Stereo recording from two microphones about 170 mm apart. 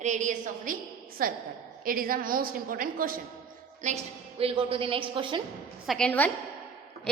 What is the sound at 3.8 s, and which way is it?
Speech, 45° right (ahead or behind).